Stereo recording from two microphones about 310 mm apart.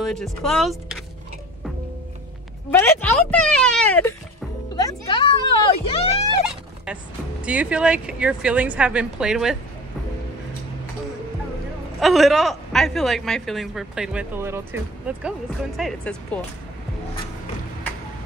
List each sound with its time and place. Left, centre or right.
0.0 s a woman's voice: centre
2.7 s a sound: centre
7.4 s a woman's voice: centre
12.0 s a woman's voice: centre